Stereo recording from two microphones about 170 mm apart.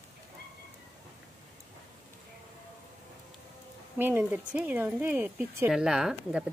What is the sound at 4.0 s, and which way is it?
Speech, 10° right (ahead or behind).